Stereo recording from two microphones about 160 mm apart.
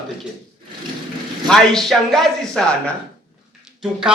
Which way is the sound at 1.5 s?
Centre (ahead or behind).